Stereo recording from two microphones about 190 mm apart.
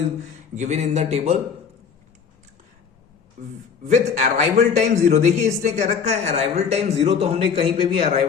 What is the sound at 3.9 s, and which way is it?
Speech, 35° right (ahead or behind).